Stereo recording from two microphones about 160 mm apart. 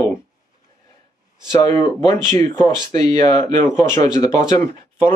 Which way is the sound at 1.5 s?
20° left (ahead or behind).